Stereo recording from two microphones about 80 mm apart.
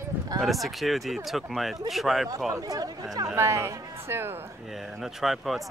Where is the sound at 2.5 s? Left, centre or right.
Right.